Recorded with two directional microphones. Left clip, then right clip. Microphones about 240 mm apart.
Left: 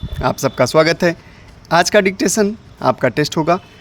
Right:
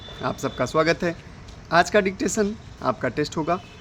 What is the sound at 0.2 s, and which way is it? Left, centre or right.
Speech, left.